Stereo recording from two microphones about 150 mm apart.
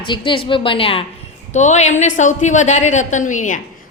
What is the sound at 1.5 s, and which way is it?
A woman's voice, 50° left (ahead or behind).